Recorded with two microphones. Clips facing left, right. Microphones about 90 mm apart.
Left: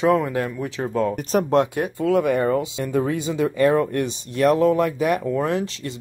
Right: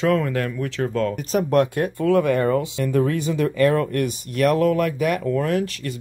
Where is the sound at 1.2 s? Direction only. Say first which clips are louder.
Left 1 dB; 45° left (ahead or behind).